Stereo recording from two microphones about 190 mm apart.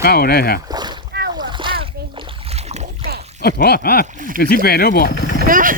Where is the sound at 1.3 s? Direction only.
25° right (ahead or behind).